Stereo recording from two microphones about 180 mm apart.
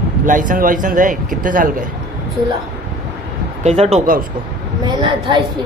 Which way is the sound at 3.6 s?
35° right (ahead or behind).